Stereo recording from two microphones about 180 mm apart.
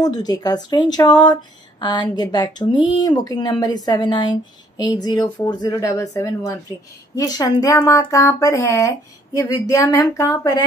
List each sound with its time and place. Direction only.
0.0 s speech: 20° left (ahead or behind)